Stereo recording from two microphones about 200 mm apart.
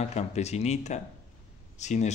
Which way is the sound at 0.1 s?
35° left (ahead or behind).